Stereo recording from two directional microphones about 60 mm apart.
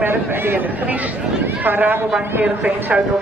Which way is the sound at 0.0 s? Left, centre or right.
Right.